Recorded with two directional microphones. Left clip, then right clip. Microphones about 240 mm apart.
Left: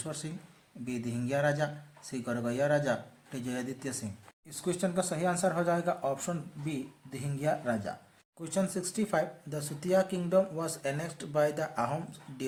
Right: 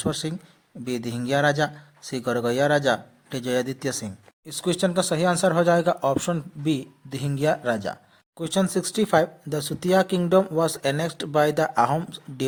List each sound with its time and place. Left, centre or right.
0.0 s speech: right